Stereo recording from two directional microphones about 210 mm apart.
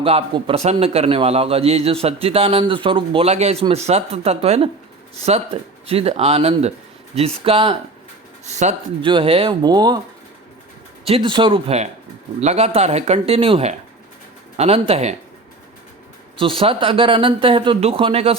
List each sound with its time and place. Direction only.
0.0 s speech: 25° right (ahead or behind)
5.9 s speech: 30° right (ahead or behind)
11.0 s speech: 25° right (ahead or behind)
16.4 s speech: 25° right (ahead or behind)